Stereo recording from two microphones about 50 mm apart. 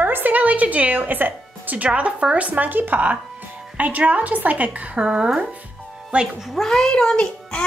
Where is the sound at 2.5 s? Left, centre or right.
Right.